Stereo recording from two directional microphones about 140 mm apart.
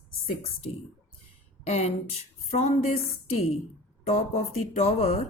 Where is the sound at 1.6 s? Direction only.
50° left (ahead or behind).